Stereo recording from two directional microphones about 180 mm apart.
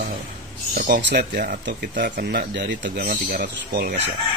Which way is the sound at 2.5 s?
80° right.